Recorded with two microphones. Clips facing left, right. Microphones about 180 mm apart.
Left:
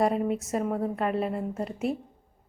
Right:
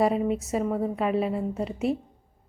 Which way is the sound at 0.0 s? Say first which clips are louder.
Right 2 dB; centre (ahead or behind).